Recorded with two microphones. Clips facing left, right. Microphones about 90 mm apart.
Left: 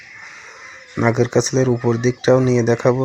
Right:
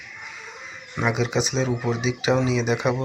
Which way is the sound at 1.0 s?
35° left (ahead or behind).